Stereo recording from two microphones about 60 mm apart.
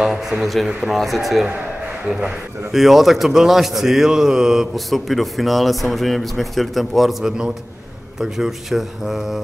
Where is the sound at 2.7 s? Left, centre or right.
Centre.